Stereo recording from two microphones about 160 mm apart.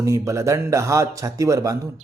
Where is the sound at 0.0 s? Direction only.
20° right (ahead or behind).